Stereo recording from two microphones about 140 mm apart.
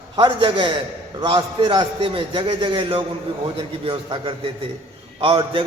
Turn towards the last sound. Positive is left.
turn(degrees=-35)  # may be behind; listen again after turning